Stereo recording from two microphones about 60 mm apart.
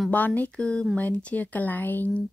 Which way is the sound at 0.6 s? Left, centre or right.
Centre.